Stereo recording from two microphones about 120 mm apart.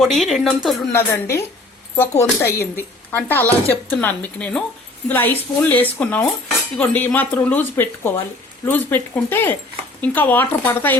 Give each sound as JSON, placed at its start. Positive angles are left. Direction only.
{"t": 0.2, "sound": "speech", "side_deg": 0}
{"t": 0.9, "sound": "a woman's voice", "side_deg": 20}